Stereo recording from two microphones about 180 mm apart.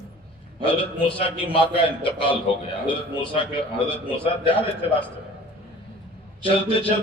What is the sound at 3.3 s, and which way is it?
A man's voice, 30° left (ahead or behind).